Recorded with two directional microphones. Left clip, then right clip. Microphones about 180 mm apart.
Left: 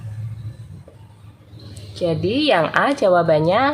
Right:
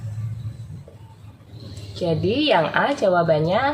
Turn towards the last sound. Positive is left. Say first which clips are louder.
# left 3 dB
turn(degrees=30)  # may be behind; listen again after turning